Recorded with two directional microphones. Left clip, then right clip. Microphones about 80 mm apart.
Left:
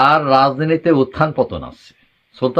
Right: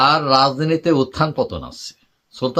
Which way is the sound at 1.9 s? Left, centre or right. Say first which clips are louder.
Right 5 dB; right.